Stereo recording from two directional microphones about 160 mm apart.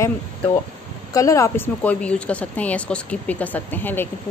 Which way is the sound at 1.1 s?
20° left (ahead or behind).